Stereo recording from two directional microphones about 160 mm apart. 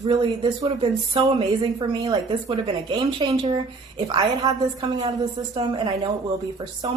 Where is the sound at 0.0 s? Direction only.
25° right (ahead or behind).